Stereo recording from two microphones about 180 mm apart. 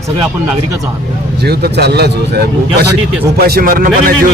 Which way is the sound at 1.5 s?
65° right (ahead or behind).